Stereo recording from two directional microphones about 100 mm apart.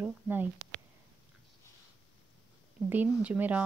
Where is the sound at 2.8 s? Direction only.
15° right (ahead or behind).